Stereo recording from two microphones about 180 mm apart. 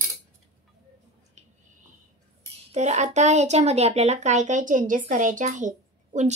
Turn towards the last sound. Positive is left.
turn(degrees=-45)  # may be behind; listen again after turning